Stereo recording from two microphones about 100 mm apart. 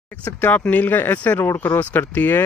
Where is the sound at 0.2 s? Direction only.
15° left (ahead or behind).